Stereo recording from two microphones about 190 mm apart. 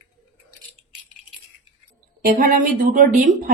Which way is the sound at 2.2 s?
45° right (ahead or behind).